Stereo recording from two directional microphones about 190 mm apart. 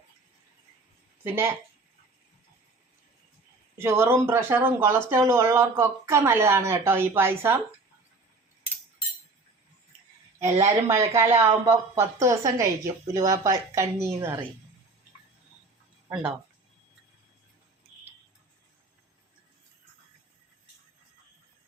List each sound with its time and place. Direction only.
1.2 s speech: 10° right (ahead or behind)
3.8 s speech: 10° right (ahead or behind)
10.5 s speech: 35° right (ahead or behind)
11.1 s speech: 15° right (ahead or behind)
16.0 s speech: 5° right (ahead or behind)